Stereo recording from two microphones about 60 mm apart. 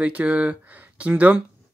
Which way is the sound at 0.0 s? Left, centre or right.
Right.